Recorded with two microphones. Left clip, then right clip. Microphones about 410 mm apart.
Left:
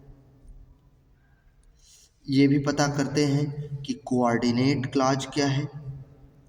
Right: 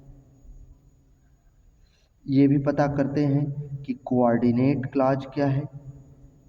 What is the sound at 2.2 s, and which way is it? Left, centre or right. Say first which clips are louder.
A man's voice: right 1 dB; right.